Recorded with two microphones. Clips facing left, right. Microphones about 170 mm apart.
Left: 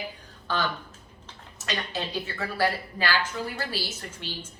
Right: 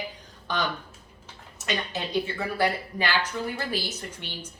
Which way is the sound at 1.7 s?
15° right (ahead or behind).